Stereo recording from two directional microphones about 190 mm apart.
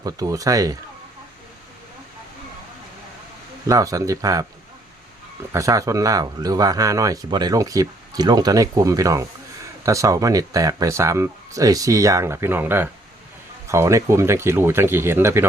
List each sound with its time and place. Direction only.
0.0 s speech: 20° right (ahead or behind)
3.7 s speech: 15° right (ahead or behind)
5.5 s speech: 15° right (ahead or behind)